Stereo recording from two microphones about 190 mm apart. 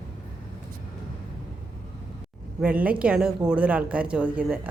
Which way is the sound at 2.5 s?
5° right (ahead or behind).